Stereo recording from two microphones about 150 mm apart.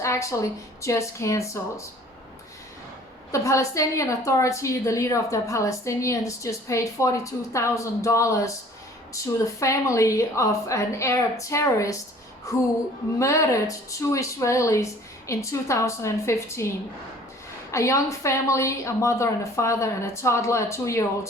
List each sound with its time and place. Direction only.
0.0 s a sound: 20° left (ahead or behind)
0.8 s a woman's voice: 20° left (ahead or behind)
3.3 s a woman's voice: 20° left (ahead or behind)
13.1 s a woman's voice: 20° left (ahead or behind)
17.7 s a woman's voice: 20° left (ahead or behind)